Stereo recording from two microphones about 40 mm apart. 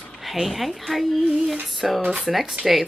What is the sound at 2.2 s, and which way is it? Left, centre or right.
Speech, centre.